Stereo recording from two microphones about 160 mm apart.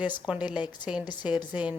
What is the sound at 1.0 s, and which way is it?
Speech, 25° left (ahead or behind).